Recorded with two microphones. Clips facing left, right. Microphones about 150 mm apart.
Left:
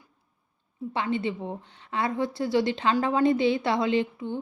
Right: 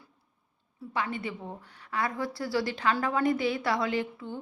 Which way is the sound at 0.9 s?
25° left (ahead or behind).